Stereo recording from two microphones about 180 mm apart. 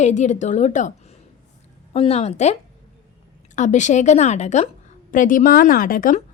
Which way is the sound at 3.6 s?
40° left (ahead or behind).